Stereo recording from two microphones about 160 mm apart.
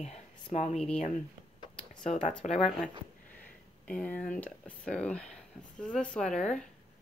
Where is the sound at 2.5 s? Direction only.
Centre (ahead or behind).